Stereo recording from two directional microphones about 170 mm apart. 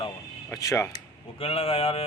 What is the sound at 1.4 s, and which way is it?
Speech, 35° left (ahead or behind).